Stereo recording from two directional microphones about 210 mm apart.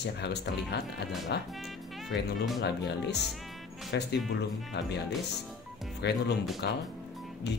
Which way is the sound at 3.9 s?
55° left (ahead or behind).